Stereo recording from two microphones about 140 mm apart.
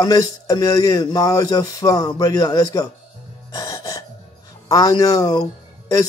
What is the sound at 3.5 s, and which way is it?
Gasp, 25° left (ahead or behind).